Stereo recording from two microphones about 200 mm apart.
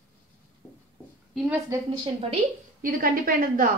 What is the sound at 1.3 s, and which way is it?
Speech, 5° right (ahead or behind).